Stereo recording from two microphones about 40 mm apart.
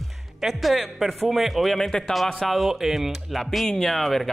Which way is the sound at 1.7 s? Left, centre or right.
Centre.